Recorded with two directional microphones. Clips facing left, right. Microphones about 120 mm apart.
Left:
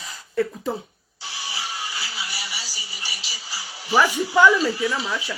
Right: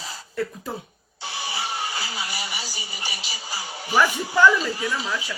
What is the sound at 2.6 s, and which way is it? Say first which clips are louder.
Music: right 3 dB; 50° right (ahead or behind).